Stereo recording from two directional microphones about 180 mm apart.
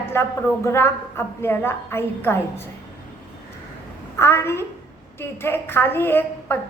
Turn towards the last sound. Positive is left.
turn(degrees=10)  # may be behind; listen again after turning